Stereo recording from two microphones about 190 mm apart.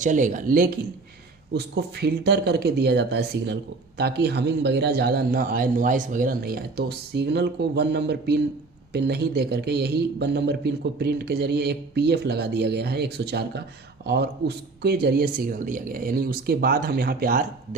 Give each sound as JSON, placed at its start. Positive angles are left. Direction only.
{"t": 0.0, "sound": "speech", "side_deg": -40}
{"t": 1.5, "sound": "speech", "side_deg": -60}